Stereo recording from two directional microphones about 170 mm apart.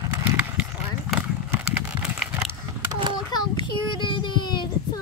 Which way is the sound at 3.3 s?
25° left (ahead or behind).